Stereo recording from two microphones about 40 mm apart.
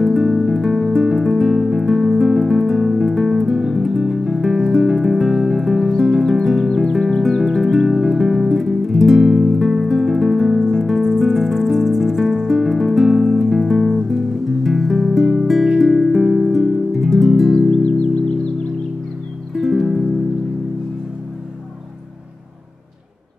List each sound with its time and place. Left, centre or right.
0.0 s music: centre
17.6 s music: left
19.5 s music: centre